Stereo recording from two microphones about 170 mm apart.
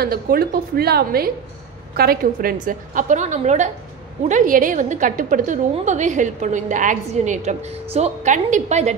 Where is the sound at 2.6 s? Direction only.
50° right (ahead or behind).